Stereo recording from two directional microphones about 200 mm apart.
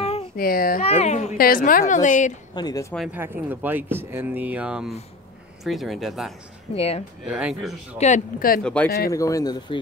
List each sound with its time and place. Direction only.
0.4 s speech: 45° left (ahead or behind)
0.8 s a woman's voice: 30° left (ahead or behind)
1.4 s a woman's voice: 45° left (ahead or behind)
2.5 s speech: 20° left (ahead or behind)
3.1 s speech: 10° right (ahead or behind)
6.7 s speech: 30° left (ahead or behind)
7.2 s speech: 5° right (ahead or behind)
8.0 s a woman's voice: 40° left (ahead or behind)
8.6 s speech: 5° left (ahead or behind)